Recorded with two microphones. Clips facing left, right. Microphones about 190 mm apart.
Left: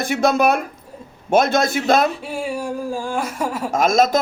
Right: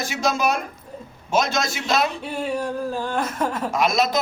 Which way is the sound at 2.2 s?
5° left (ahead or behind).